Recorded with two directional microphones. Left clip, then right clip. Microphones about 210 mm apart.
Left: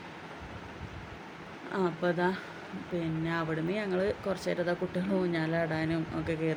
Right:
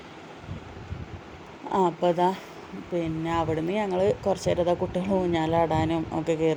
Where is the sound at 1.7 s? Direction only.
20° right (ahead or behind).